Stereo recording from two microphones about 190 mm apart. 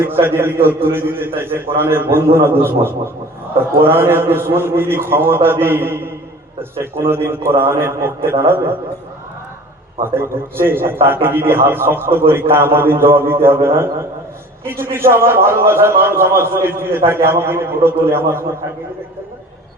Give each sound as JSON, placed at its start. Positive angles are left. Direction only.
{"t": 0.0, "sound": "a man's voice", "side_deg": -10}
{"t": 10.2, "sound": "a man's voice", "side_deg": -10}